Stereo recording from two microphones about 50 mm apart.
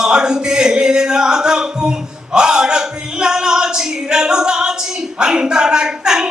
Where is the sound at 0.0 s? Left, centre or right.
Centre.